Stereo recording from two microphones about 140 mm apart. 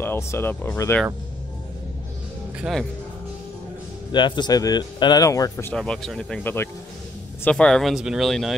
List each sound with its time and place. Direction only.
0.0 s speech: 15° left (ahead or behind)
2.6 s speech: centre (ahead or behind)
4.1 s speech: 30° left (ahead or behind)
5.7 s speech: 5° left (ahead or behind)